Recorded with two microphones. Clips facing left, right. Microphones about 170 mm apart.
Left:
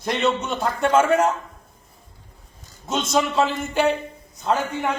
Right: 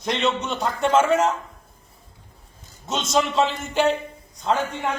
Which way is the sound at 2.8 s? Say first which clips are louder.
Left 1 dB; centre (ahead or behind).